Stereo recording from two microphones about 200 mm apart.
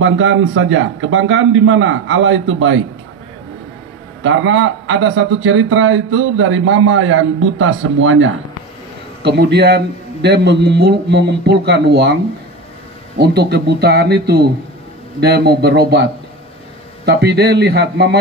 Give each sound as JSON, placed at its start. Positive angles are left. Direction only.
{"t": 0.0, "sound": "speech", "side_deg": -75}
{"t": 4.2, "sound": "speech", "side_deg": -75}
{"t": 9.2, "sound": "a man's voice", "side_deg": -55}
{"t": 13.2, "sound": "a man's voice", "side_deg": -55}